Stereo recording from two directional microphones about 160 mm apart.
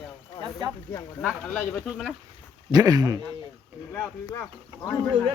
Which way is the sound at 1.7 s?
Centre (ahead or behind).